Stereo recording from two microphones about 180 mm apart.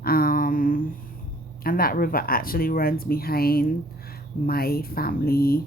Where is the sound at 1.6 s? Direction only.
55° left (ahead or behind).